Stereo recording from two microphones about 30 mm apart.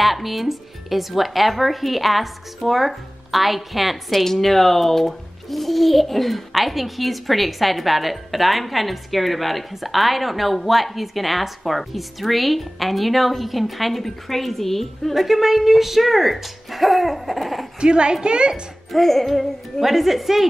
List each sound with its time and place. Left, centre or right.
0.0 s a child's voice: centre
4.2 s a child's voice: centre
15.1 s a child's voice: centre
17.7 s speech: right
18.9 s a child's voice: centre
19.8 s speech: centre